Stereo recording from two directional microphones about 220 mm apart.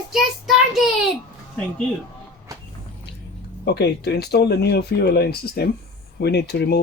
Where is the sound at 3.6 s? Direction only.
50° left (ahead or behind).